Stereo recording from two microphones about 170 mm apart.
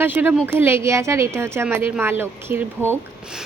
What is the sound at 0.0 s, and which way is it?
A woman's voice, 10° right (ahead or behind).